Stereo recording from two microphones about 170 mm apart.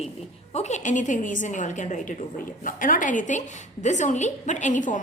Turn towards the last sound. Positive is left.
turn(degrees=50)  # may be behind; listen again after turning